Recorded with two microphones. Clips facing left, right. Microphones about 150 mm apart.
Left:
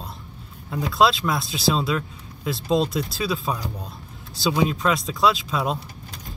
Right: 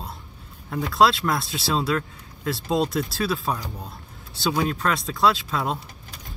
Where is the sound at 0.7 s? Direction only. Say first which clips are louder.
Even; centre (ahead or behind).